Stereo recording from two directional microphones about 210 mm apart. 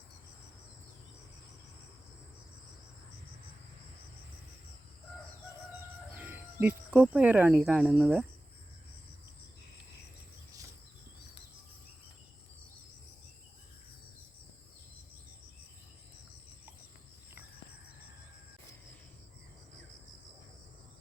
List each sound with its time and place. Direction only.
6.1 s speech: 10° right (ahead or behind)